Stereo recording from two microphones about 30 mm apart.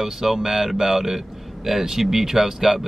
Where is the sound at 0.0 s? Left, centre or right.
Centre.